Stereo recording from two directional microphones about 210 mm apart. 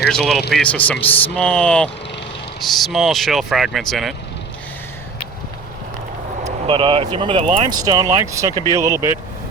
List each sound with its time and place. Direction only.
0.1 s speech: centre (ahead or behind)
6.4 s speech: 25° right (ahead or behind)